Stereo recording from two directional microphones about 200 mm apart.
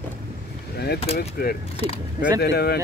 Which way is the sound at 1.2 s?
50° left (ahead or behind).